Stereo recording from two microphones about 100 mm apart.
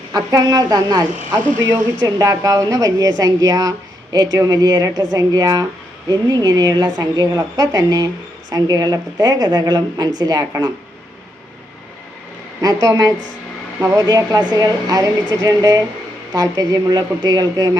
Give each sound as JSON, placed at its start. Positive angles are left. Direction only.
{"t": 0.1, "sound": "speech", "side_deg": -40}
{"t": 12.6, "sound": "speech", "side_deg": -35}